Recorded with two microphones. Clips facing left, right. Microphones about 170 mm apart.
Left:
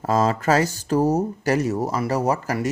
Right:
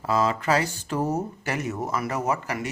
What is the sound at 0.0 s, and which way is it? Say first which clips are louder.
Speech: left 4 dB; 40° left (ahead or behind).